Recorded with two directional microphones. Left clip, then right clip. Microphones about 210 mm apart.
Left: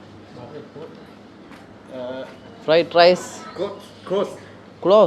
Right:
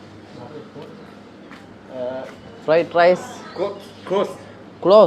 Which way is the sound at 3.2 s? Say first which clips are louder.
Right 2 dB; 30° left (ahead or behind).